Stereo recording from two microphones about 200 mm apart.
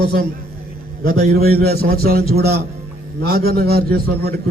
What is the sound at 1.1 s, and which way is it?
A man's voice, 50° right (ahead or behind).